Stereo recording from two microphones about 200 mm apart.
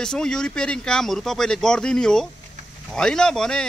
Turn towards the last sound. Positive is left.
turn(degrees=5)  # may be behind; listen again after turning